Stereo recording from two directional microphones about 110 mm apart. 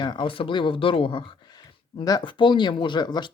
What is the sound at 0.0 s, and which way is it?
Speech, 45° left (ahead or behind).